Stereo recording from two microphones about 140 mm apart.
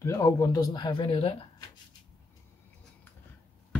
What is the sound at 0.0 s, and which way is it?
Speech, 25° left (ahead or behind).